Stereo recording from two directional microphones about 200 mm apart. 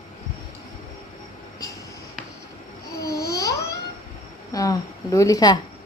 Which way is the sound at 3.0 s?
15° left (ahead or behind).